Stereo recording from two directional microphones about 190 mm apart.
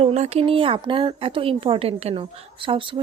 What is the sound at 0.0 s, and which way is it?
Speech, 35° right (ahead or behind).